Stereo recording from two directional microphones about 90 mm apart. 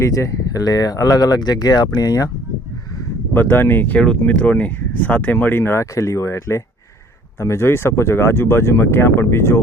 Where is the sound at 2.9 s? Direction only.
35° left (ahead or behind).